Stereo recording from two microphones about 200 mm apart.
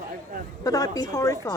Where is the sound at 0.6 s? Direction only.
20° left (ahead or behind).